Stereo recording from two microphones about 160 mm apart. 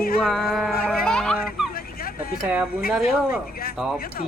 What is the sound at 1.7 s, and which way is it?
Vehicle, 70° left (ahead or behind).